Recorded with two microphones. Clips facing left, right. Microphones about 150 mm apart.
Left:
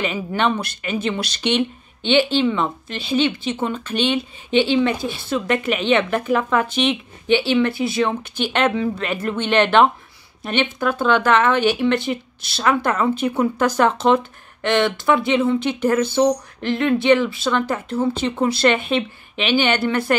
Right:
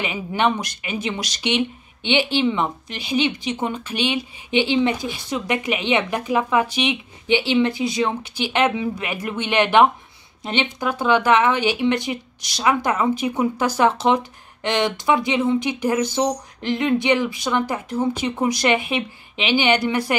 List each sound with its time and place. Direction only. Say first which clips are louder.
0.0 s speech: left 1 dB; 15° right (ahead or behind)